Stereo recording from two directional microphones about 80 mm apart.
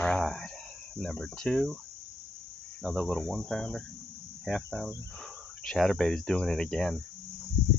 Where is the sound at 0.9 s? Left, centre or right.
Centre.